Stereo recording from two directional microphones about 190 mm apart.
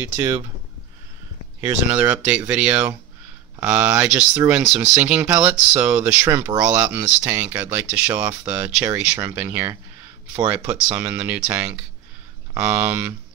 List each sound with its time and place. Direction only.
0.0 s speech: 15° right (ahead or behind)
1.9 s speech: 5° right (ahead or behind)